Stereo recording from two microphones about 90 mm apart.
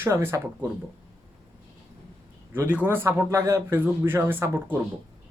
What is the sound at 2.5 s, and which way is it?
A woman's voice, 20° right (ahead or behind).